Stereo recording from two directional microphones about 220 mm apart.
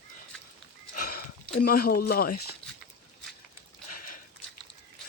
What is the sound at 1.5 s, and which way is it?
Speech, 45° left (ahead or behind).